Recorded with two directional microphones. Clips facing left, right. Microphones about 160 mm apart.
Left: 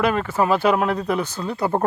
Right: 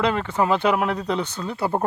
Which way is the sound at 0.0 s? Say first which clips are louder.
Left 2 dB; 20° right (ahead or behind).